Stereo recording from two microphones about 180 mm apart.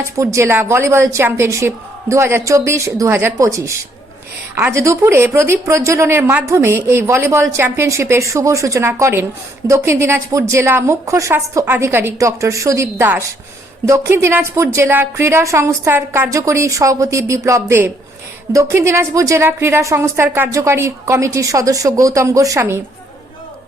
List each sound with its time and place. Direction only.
0.2 s a woman's voice: 15° right (ahead or behind)